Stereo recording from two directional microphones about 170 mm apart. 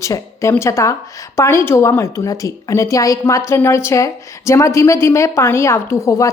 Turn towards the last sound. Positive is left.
turn(degrees=20)  # may be behind; listen again after turning